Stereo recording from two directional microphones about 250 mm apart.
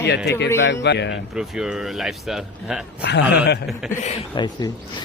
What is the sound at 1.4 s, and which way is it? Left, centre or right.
Speech, centre.